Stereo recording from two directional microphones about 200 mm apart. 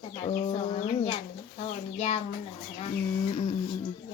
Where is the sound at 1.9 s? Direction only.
35° left (ahead or behind).